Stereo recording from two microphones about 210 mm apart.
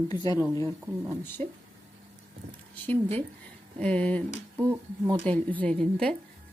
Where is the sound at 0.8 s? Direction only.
15° right (ahead or behind).